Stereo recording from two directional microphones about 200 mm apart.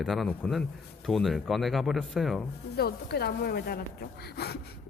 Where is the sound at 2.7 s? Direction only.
55° left (ahead or behind).